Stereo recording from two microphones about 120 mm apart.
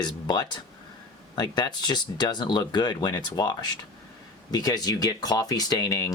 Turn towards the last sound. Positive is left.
turn(degrees=30)  # may be behind; listen again after turning